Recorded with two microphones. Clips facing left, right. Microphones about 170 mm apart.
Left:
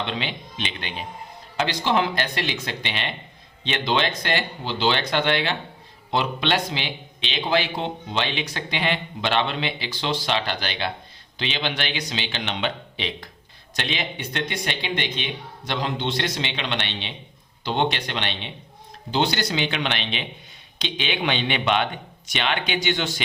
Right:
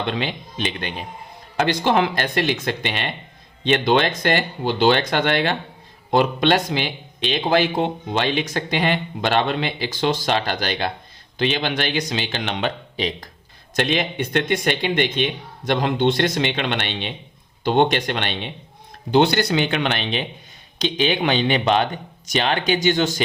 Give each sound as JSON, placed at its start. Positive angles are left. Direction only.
{"t": 0.1, "sound": "speech", "side_deg": -45}